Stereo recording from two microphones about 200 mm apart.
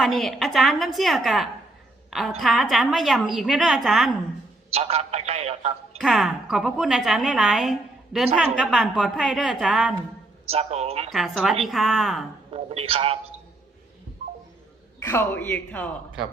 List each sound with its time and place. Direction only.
0.0 s speech: centre (ahead or behind)
4.7 s a man's voice: 30° right (ahead or behind)
6.0 s speech: centre (ahead or behind)
10.5 s a man's voice: 30° right (ahead or behind)
11.1 s speech: centre (ahead or behind)
12.5 s a man's voice: 30° right (ahead or behind)
15.0 s a man's voice: 10° left (ahead or behind)